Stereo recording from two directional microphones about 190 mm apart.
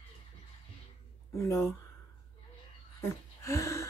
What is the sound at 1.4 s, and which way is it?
Speech, 15° left (ahead or behind).